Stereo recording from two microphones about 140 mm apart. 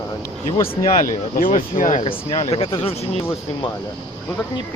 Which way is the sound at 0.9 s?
70° left (ahead or behind).